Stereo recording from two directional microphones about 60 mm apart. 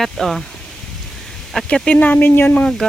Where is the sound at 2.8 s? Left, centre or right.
Centre.